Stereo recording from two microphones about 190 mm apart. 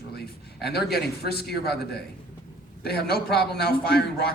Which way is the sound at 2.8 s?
55° left (ahead or behind).